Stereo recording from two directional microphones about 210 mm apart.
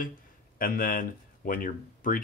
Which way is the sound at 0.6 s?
40° left (ahead or behind).